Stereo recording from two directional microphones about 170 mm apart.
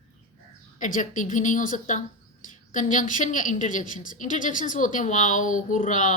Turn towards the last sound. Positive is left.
turn(degrees=50)  # may be behind; listen again after turning